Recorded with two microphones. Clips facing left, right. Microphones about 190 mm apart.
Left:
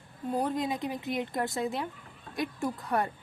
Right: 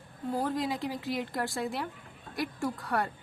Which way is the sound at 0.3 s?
20° left (ahead or behind).